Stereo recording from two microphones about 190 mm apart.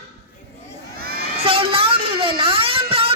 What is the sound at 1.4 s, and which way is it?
Speech, 30° right (ahead or behind).